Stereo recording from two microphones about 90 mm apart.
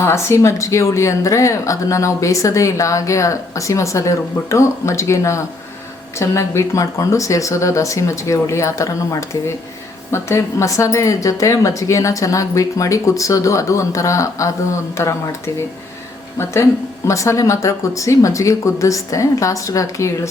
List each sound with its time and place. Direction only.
0.0 s speech: 30° left (ahead or behind)
17.1 s speech: 35° left (ahead or behind)